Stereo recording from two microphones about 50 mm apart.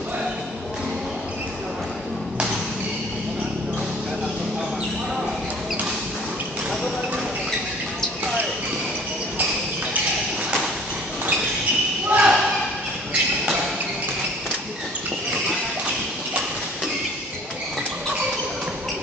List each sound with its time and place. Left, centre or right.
12.1 s basketball bounce: right